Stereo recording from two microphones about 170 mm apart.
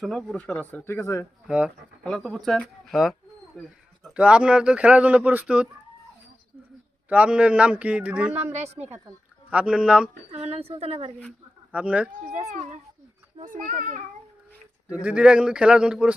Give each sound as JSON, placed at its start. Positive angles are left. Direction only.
{"t": 0.0, "sound": "speech", "side_deg": 0}
{"t": 1.5, "sound": "speech", "side_deg": -5}
{"t": 7.1, "sound": "speech", "side_deg": -5}
{"t": 8.5, "sound": "speech", "side_deg": -40}
{"t": 9.5, "sound": "speech", "side_deg": -5}
{"t": 10.3, "sound": "speech", "side_deg": -40}
{"t": 11.7, "sound": "speech", "side_deg": -5}
{"t": 12.3, "sound": "a child's voice", "side_deg": -40}
{"t": 15.0, "sound": "speech", "side_deg": -5}